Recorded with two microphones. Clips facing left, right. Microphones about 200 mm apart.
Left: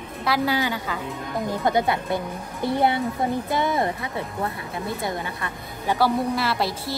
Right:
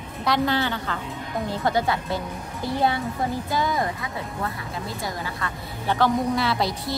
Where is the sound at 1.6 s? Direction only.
20° left (ahead or behind).